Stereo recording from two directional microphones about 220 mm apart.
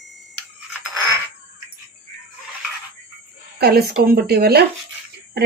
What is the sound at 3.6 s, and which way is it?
Speech, 45° right (ahead or behind).